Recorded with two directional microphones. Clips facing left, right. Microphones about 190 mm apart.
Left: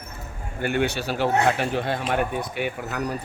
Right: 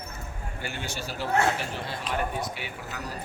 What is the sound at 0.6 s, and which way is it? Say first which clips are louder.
Speech: left 12 dB; 60° left (ahead or behind).